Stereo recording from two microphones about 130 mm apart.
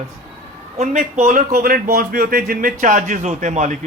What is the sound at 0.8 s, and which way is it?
Speech, 75° right (ahead or behind).